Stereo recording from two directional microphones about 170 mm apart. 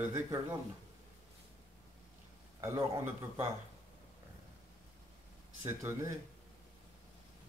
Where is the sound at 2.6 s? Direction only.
15° right (ahead or behind).